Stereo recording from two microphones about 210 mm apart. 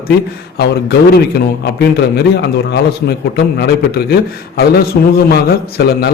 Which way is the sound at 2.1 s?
50° left (ahead or behind).